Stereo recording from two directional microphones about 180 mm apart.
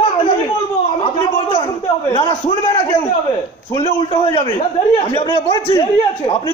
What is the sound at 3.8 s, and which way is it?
A man's voice, 25° left (ahead or behind).